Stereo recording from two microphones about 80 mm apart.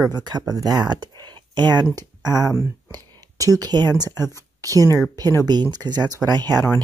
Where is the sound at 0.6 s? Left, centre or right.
Right.